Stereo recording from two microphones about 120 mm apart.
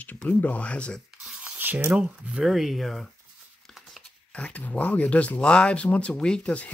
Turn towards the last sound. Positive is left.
turn(degrees=10)  # may be behind; listen again after turning